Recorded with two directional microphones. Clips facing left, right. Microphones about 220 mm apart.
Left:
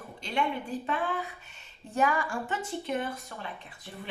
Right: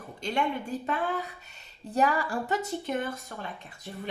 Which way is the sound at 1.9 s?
35° right (ahead or behind).